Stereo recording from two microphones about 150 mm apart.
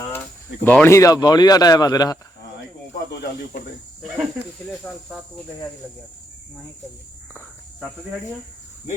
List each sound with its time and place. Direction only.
0.6 s speech: 15° left (ahead or behind)
4.0 s speech: centre (ahead or behind)